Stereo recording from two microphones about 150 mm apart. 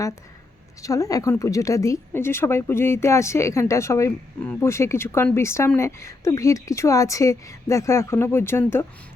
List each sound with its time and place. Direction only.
0.8 s a woman's voice: 20° left (ahead or behind)